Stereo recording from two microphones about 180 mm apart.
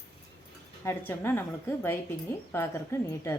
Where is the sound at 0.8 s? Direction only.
15° left (ahead or behind).